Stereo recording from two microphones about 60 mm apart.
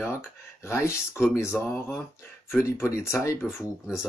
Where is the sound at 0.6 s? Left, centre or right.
Left.